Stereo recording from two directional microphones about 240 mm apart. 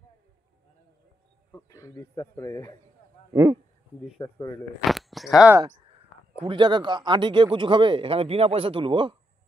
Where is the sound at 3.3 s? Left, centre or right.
Centre.